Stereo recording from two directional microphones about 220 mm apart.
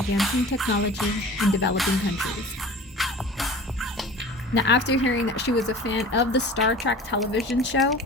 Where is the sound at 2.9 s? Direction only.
Centre (ahead or behind).